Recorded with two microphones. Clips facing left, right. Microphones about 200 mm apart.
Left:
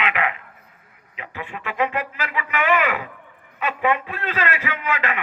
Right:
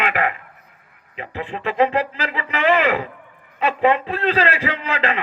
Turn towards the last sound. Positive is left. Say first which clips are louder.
# right 2 dB
turn(degrees=-30)  # may be behind; listen again after turning